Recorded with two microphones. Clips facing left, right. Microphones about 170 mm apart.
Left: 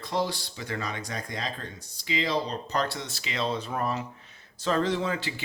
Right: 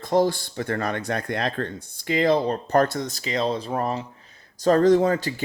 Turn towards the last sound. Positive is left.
turn(degrees=-45)  # may be behind; listen again after turning